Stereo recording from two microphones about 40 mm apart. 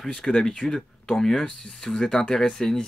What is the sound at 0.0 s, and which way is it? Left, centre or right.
Speech, centre.